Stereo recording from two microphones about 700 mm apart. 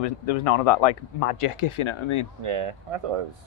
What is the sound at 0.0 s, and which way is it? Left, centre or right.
Speech, left.